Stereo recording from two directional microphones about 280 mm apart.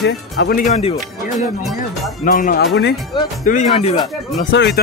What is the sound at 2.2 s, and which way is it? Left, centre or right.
Speech, left.